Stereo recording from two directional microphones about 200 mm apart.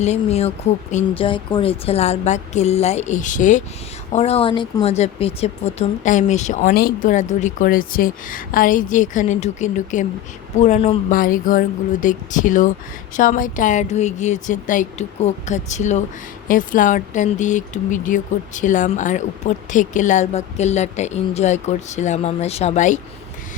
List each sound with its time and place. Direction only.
0.0 s a man's voice: 30° left (ahead or behind)
11.1 s speech: 40° left (ahead or behind)